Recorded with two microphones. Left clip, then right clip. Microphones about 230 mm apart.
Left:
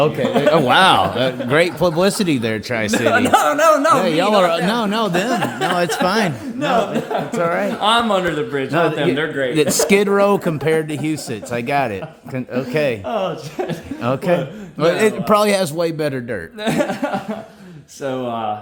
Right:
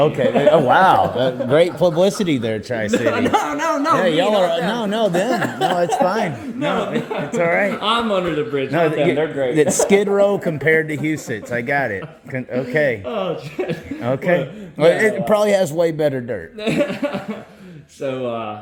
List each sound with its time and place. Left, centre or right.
0.0 s speech: centre
0.5 s speech: left
1.1 s speech: centre
5.4 s speech: centre
6.0 s speech: left
7.3 s speech: centre
7.8 s speech: left
9.7 s speech: left
16.3 s speech: left